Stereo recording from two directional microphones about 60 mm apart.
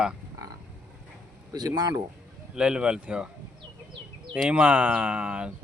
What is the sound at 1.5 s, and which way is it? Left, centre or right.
Speech, right.